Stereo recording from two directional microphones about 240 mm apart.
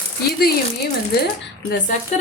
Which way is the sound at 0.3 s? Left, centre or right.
Left.